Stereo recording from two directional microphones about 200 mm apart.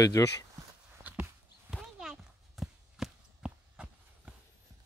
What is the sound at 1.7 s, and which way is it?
Walk, centre (ahead or behind).